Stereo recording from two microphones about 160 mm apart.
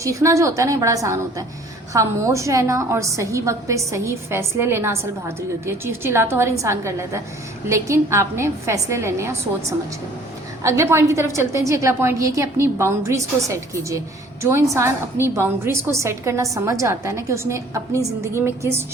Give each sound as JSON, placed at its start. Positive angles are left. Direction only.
{"t": 0.0, "sound": "a woman's voice", "side_deg": -20}